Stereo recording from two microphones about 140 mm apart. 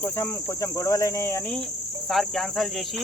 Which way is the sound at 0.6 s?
20° left (ahead or behind).